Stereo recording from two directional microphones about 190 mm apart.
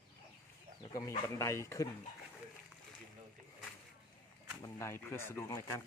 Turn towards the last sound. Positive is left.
turn(degrees=15)  # may be behind; listen again after turning